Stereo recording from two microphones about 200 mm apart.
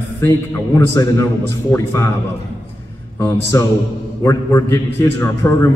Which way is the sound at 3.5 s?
15° left (ahead or behind).